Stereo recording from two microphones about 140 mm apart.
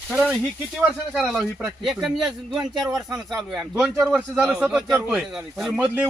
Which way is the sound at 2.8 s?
20° right (ahead or behind).